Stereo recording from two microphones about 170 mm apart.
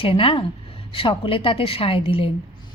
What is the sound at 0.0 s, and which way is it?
A woman's voice, 35° left (ahead or behind).